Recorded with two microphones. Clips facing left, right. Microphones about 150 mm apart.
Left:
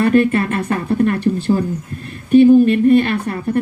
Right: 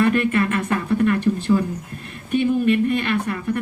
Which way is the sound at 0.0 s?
35° left (ahead or behind).